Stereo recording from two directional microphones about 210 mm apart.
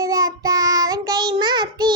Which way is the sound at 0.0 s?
15° right (ahead or behind).